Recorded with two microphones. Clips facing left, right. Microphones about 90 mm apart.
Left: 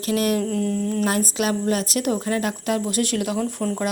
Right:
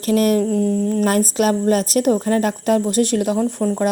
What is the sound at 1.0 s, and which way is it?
A woman's voice, 45° right (ahead or behind).